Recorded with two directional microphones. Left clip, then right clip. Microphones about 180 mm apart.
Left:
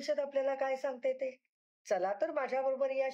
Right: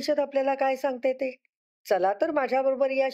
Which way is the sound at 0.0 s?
30° right (ahead or behind).